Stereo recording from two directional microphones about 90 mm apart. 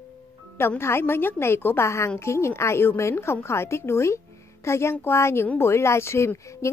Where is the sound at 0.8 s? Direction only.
30° left (ahead or behind).